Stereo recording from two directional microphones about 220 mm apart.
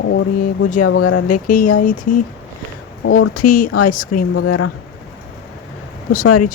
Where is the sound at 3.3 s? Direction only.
40° left (ahead or behind).